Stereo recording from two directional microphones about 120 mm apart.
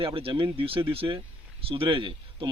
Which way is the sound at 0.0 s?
50° right (ahead or behind).